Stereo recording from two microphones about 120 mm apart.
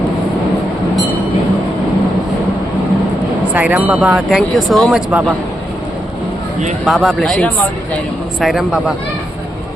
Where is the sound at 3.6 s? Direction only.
15° right (ahead or behind).